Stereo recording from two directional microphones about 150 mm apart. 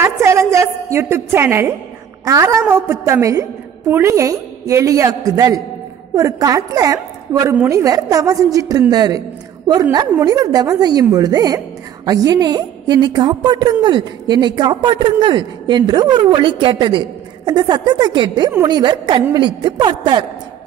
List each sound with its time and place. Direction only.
0.0 s a woman's voice: 15° right (ahead or behind)